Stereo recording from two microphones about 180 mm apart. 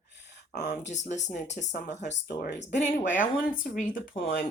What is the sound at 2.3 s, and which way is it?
Speech, 60° left (ahead or behind).